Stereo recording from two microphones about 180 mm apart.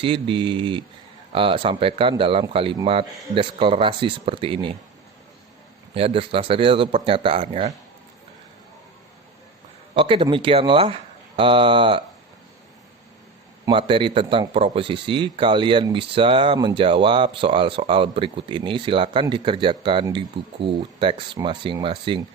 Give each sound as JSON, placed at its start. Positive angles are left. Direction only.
{"t": 0.0, "sound": "speech", "side_deg": -30}
{"t": 5.9, "sound": "speech", "side_deg": -30}
{"t": 9.9, "sound": "speech", "side_deg": -30}
{"t": 13.7, "sound": "speech", "side_deg": -25}